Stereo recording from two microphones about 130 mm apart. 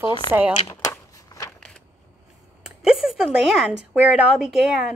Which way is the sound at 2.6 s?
5° right (ahead or behind).